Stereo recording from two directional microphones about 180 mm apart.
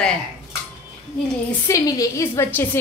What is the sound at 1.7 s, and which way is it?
A woman's voice, 20° left (ahead or behind).